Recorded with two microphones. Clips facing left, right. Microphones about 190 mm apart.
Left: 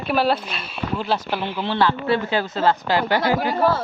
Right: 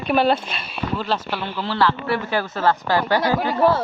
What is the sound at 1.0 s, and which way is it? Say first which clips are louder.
Speech: left 1 dB; 15° left (ahead or behind).